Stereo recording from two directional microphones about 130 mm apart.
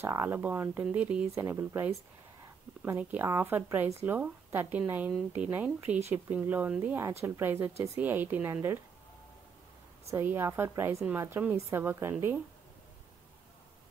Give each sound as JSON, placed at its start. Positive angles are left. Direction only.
{"t": 0.0, "sound": "speech", "side_deg": -20}
{"t": 10.0, "sound": "speech", "side_deg": -20}